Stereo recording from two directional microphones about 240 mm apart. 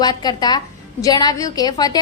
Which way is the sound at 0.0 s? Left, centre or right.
Centre.